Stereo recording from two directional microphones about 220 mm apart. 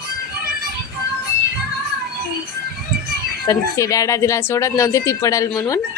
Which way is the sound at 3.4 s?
15° left (ahead or behind).